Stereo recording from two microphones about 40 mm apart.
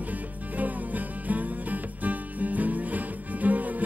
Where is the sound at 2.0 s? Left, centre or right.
Right.